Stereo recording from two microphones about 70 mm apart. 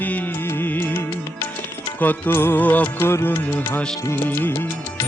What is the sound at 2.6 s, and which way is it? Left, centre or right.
Music, left.